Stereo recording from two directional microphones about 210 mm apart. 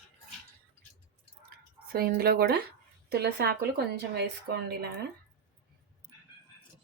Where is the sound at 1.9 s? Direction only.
45° right (ahead or behind).